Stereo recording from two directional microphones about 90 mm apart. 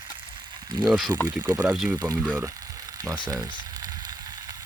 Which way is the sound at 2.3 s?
20° right (ahead or behind).